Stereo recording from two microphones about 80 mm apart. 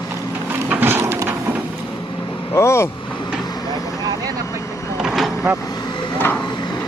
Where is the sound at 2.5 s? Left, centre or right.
Left.